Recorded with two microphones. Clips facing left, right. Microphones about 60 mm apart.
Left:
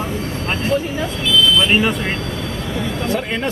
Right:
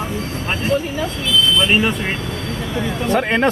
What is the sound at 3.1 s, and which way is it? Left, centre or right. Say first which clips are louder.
Speech: right 7 dB; right.